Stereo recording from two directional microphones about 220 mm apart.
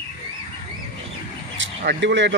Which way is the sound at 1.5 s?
55° right (ahead or behind).